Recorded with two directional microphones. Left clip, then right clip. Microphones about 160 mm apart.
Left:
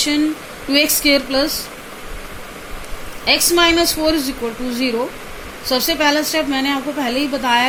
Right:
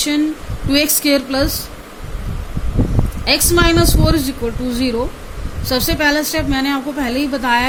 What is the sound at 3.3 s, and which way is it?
A woman's voice, 75° right (ahead or behind).